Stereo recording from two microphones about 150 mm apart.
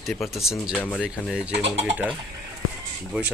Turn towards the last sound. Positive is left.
turn(degrees=-5)  # may be behind; listen again after turning